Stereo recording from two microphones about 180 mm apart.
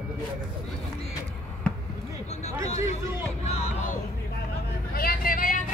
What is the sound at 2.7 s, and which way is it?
Speech, 40° left (ahead or behind).